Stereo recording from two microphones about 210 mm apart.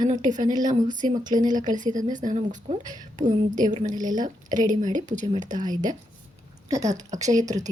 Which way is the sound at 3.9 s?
20° right (ahead or behind).